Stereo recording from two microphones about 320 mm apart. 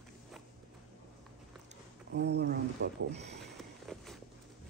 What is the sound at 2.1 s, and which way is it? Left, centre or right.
Speech, right.